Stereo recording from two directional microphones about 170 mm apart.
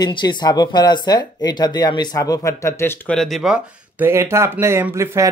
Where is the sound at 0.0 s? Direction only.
25° left (ahead or behind).